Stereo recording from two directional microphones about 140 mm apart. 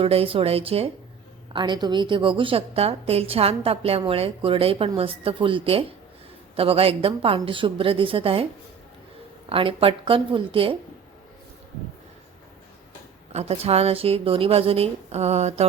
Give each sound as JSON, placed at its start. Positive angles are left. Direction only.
{"t": 0.0, "sound": "a woman's voice", "side_deg": -45}
{"t": 1.5, "sound": "a woman's voice", "side_deg": -30}
{"t": 9.5, "sound": "a woman's voice", "side_deg": -40}
{"t": 13.3, "sound": "a woman's voice", "side_deg": -45}